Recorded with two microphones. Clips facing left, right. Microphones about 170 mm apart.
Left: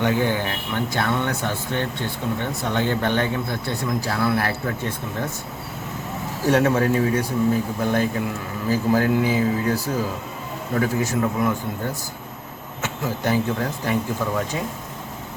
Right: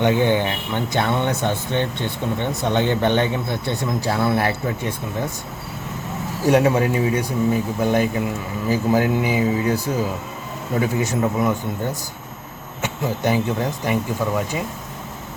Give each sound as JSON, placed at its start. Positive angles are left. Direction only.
{"t": 0.0, "sound": "speech", "side_deg": -20}
{"t": 6.5, "sound": "speech", "side_deg": -15}
{"t": 12.8, "sound": "speech", "side_deg": -15}